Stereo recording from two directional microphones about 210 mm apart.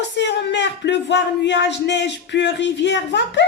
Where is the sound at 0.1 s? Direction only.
55° left (ahead or behind).